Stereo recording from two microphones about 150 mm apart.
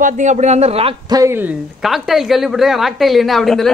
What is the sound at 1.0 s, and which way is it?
Speech, 20° right (ahead or behind).